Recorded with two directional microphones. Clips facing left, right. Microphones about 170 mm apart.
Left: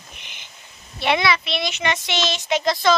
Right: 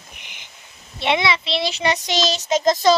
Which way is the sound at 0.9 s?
25° right (ahead or behind).